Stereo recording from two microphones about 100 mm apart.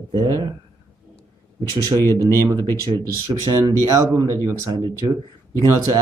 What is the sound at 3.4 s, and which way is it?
Speech, 40° right (ahead or behind).